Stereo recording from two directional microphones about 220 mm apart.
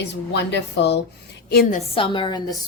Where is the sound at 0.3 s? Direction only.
50° left (ahead or behind).